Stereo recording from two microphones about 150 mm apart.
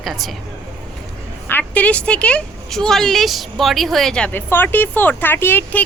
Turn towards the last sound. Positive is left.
turn(degrees=10)  # may be behind; listen again after turning